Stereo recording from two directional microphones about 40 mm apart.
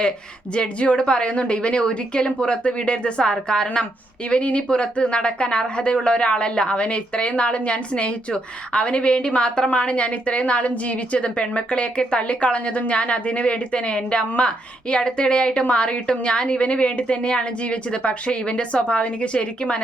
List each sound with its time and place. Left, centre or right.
0.5 s speech: left
4.3 s speech: left